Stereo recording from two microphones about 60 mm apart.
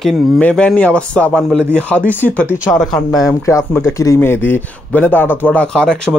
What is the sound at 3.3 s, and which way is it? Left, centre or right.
Speech, left.